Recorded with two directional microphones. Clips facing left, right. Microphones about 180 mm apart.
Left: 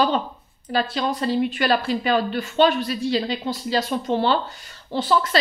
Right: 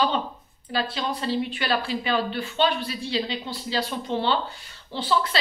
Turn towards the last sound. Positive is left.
turn(degrees=45)  # may be behind; listen again after turning